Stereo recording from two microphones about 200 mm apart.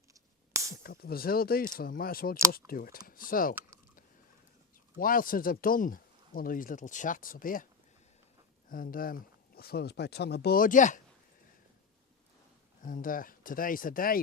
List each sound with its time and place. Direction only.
0.8 s speech: 50° left (ahead or behind)
4.9 s speech: 45° left (ahead or behind)
8.7 s speech: 45° left (ahead or behind)
12.8 s speech: 40° left (ahead or behind)